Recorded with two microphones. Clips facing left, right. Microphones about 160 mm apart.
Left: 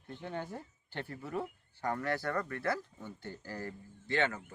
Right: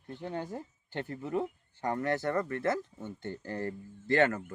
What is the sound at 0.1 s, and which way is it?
Speech, 15° right (ahead or behind).